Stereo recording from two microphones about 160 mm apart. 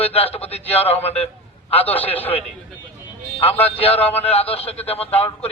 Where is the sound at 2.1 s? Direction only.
10° left (ahead or behind).